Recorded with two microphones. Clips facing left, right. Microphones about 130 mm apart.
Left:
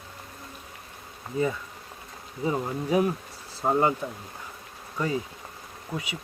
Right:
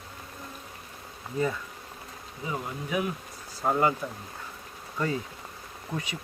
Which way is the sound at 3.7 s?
20° left (ahead or behind).